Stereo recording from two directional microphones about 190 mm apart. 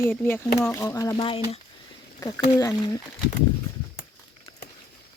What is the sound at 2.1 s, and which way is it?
Speech, 15° left (ahead or behind).